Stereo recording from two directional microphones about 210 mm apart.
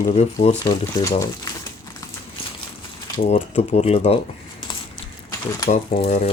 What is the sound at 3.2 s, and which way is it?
Speech, 30° left (ahead or behind).